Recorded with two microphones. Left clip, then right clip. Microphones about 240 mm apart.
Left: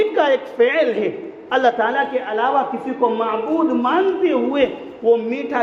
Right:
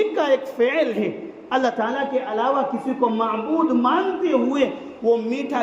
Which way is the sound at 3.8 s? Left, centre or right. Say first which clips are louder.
Left 3 dB; right.